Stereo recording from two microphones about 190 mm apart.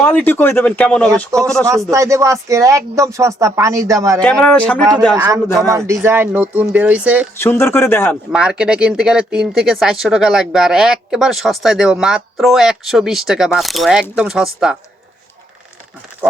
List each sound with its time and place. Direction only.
0.0 s speech: 10° left (ahead or behind)
1.6 s speech: 15° right (ahead or behind)
4.2 s speech: 5° left (ahead or behind)
5.1 s speech: 15° right (ahead or behind)
7.3 s speech: 15° left (ahead or behind)
8.3 s speech: 5° right (ahead or behind)